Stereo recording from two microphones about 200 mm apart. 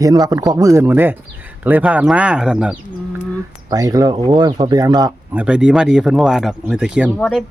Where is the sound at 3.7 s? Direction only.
20° right (ahead or behind).